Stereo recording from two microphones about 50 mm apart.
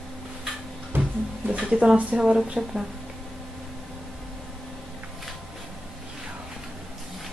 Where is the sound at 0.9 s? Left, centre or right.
Right.